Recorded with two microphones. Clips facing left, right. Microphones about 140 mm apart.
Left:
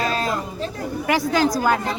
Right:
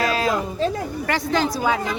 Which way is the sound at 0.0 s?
5° right (ahead or behind).